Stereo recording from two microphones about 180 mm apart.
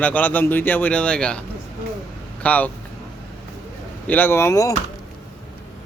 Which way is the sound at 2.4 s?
10° left (ahead or behind).